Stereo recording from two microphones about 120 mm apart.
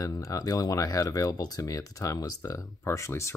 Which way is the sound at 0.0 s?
30° left (ahead or behind).